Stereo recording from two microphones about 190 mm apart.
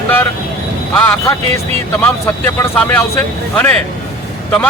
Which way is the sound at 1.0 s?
5° left (ahead or behind).